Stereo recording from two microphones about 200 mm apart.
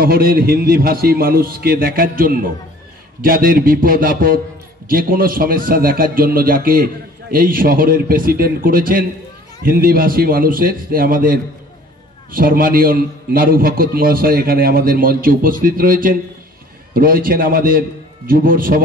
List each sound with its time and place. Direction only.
0.0 s a man's voice: 45° right (ahead or behind)